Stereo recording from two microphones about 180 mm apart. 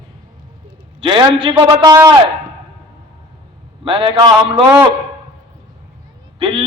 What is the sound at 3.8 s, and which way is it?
Speech, 30° right (ahead or behind).